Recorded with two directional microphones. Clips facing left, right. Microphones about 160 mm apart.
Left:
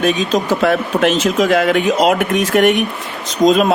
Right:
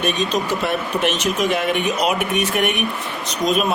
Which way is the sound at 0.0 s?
90° left.